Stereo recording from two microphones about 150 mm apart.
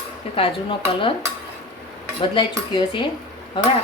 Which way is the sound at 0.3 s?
35° left (ahead or behind).